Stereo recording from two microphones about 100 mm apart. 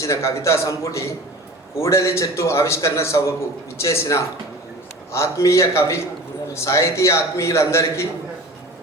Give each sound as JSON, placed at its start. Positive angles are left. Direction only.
{"t": 0.0, "sound": "a man's voice", "side_deg": 30}